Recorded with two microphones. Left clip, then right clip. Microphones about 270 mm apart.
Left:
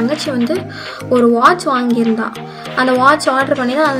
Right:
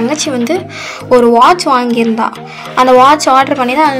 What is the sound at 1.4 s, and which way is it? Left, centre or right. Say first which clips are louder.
Speech: right 4 dB; centre.